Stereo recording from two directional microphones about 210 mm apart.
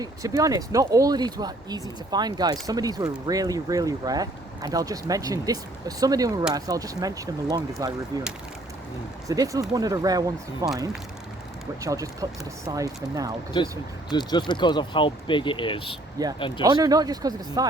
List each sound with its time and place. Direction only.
0.0 s speech: 15° right (ahead or behind)
9.2 s speech: 15° right (ahead or behind)
11.8 s speech: 15° right (ahead or behind)
13.5 s speech: 20° left (ahead or behind)
16.2 s speech: 15° right (ahead or behind)